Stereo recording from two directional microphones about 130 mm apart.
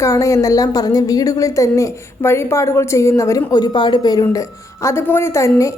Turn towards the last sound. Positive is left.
turn(degrees=20)  # may be behind; listen again after turning